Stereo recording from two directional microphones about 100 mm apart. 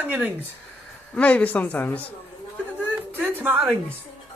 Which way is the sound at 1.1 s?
15° left (ahead or behind).